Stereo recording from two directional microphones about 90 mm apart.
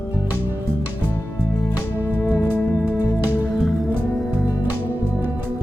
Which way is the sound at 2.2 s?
15° left (ahead or behind).